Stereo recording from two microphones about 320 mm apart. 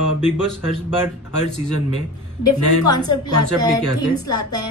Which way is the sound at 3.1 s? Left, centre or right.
Left.